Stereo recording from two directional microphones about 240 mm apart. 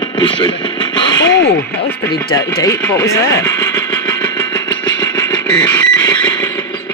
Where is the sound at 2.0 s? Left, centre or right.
Centre.